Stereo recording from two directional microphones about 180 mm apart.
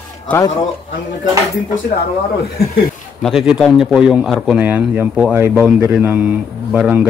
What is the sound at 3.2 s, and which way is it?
Speech, centre (ahead or behind).